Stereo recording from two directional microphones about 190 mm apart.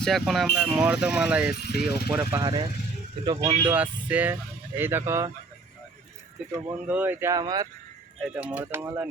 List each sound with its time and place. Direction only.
0.0 s speech: centre (ahead or behind)
1.5 s speech: 60° left (ahead or behind)
1.8 s speech: 5° right (ahead or behind)
2.4 s speech: 25° right (ahead or behind)
3.7 s speech: 10° right (ahead or behind)
6.7 s speech: 10° right (ahead or behind)
8.2 s speech: 5° right (ahead or behind)